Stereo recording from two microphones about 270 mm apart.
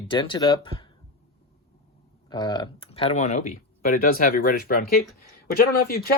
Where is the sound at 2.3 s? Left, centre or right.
Centre.